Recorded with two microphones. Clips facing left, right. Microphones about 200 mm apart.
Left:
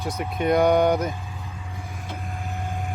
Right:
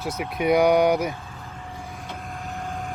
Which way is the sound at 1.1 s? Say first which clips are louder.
Left 2 dB; 15° left (ahead or behind).